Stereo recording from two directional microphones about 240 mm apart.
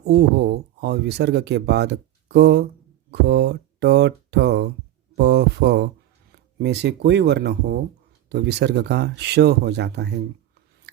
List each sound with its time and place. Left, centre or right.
0.1 s speech: right
10.9 s scissors: right